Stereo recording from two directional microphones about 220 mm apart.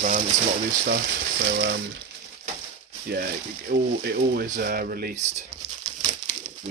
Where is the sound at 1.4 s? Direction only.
50° right (ahead or behind).